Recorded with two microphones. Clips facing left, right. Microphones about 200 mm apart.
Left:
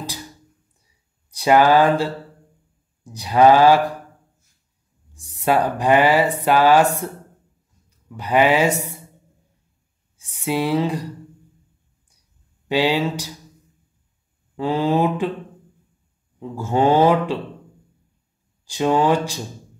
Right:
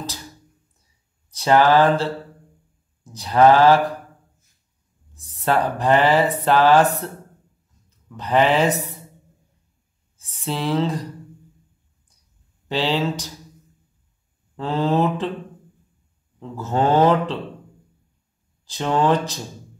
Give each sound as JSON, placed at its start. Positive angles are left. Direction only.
{"t": 1.3, "sound": "speech", "side_deg": 15}
{"t": 5.1, "sound": "speech", "side_deg": 10}
{"t": 8.1, "sound": "speech", "side_deg": 10}
{"t": 10.1, "sound": "speech", "side_deg": 10}
{"t": 12.6, "sound": "speech", "side_deg": 10}
{"t": 14.6, "sound": "speech", "side_deg": 10}
{"t": 16.3, "sound": "speech", "side_deg": 10}
{"t": 18.7, "sound": "speech", "side_deg": 10}